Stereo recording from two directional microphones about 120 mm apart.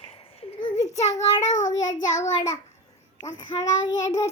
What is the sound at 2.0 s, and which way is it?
Speech, 90° left.